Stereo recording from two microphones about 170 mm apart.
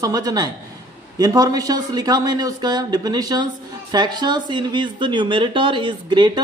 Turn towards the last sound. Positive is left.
turn(degrees=-25)  # may be behind; listen again after turning